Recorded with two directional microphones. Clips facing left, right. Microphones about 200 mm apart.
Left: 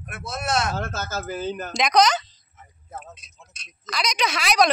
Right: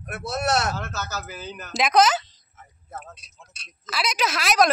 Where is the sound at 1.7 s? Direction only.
5° right (ahead or behind).